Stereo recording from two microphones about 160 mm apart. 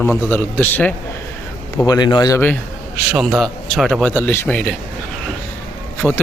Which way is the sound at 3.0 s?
Centre (ahead or behind).